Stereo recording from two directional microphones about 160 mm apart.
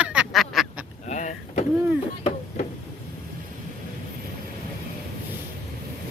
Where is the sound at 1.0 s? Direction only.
50° left (ahead or behind).